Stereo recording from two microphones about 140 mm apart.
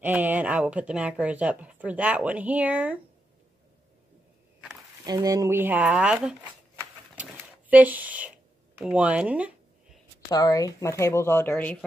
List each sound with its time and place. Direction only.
0.0 s a woman's voice: 10° right (ahead or behind)
5.0 s a woman's voice: 25° right (ahead or behind); by 6.3 s 5° right (ahead or behind)
7.2 s a sound: 10° right (ahead or behind)
10.3 s speech: 25° left (ahead or behind); by 11.8 s 10° left (ahead or behind)